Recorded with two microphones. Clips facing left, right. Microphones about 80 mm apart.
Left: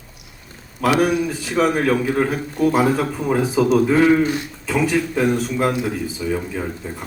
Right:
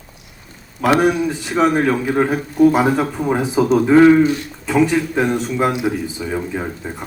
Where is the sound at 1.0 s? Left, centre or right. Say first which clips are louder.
Right 2 dB; right.